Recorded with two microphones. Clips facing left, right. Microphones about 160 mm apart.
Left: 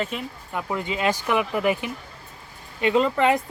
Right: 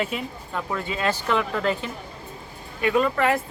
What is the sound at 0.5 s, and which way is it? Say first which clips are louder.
Speech: left 1 dB; 20° left (ahead or behind).